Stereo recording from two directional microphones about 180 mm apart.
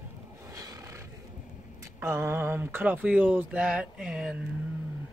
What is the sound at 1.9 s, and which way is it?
Speech, 15° right (ahead or behind).